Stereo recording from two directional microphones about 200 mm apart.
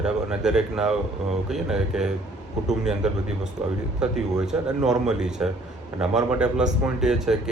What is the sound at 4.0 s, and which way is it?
Speech, 5° right (ahead or behind).